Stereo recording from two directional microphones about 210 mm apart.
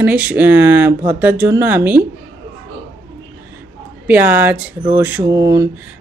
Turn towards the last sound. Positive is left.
turn(degrees=-15)  # may be behind; listen again after turning